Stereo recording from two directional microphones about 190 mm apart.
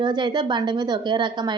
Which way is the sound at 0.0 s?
25° right (ahead or behind).